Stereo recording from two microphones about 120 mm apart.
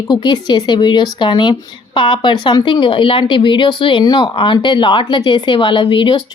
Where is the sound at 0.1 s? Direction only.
35° left (ahead or behind).